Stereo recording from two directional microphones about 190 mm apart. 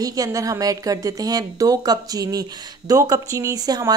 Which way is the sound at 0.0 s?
20° right (ahead or behind).